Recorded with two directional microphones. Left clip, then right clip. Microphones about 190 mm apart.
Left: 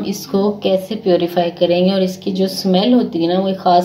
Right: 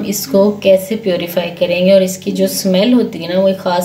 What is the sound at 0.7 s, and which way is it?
A woman's voice, 45° left (ahead or behind).